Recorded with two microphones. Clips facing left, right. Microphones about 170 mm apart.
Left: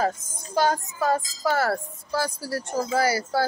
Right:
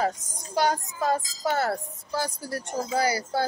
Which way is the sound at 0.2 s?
70° right (ahead or behind).